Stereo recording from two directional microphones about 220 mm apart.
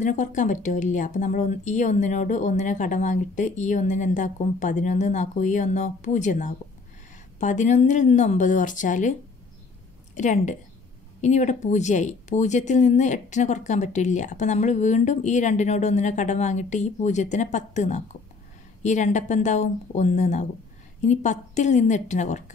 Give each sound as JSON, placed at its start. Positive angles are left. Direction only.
{"t": 0.0, "sound": "speech", "side_deg": 35}
{"t": 10.1, "sound": "speech", "side_deg": 35}